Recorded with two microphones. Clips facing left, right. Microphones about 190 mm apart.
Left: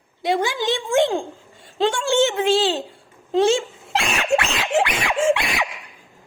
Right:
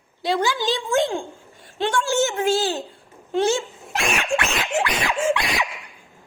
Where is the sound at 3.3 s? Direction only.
25° left (ahead or behind).